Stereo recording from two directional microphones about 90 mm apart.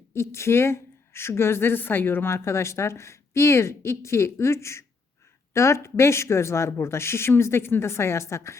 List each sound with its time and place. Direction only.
0.1 s a woman's voice: 30° left (ahead or behind)